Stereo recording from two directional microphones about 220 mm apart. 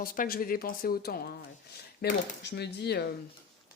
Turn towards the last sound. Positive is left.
turn(degrees=45)  # may be behind; listen again after turning